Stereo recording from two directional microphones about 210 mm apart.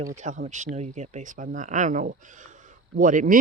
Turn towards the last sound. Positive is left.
turn(degrees=-40)  # may be behind; listen again after turning